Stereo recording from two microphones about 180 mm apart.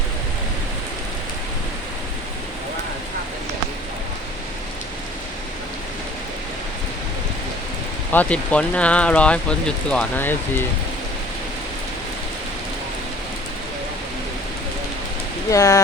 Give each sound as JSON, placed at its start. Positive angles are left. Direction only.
{"t": 8.1, "sound": "speech", "side_deg": 10}
{"t": 15.4, "sound": "speech", "side_deg": 20}